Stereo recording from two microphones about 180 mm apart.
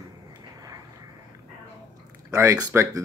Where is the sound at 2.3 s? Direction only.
20° right (ahead or behind).